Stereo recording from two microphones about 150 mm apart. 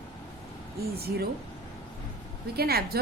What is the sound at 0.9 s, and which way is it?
Speech, 90° right.